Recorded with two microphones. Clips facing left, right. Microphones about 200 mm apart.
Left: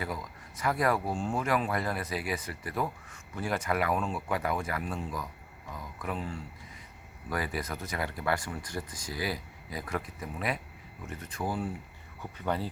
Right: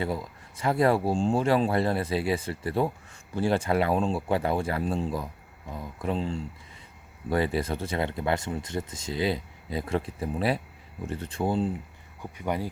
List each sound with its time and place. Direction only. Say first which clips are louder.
0.0 s speech: right 6 dB; 30° right (ahead or behind)
12.2 s speech: right 2 dB; 15° right (ahead or behind)